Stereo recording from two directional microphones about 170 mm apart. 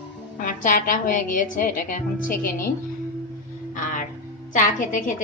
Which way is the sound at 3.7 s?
50° left (ahead or behind).